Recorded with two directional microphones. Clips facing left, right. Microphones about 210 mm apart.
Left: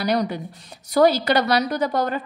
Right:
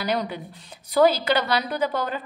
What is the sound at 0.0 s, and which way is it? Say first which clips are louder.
A woman's voice: left 4 dB; 40° left (ahead or behind).